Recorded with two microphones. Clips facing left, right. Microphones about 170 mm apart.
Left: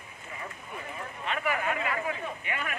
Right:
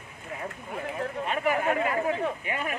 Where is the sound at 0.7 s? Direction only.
75° right (ahead or behind).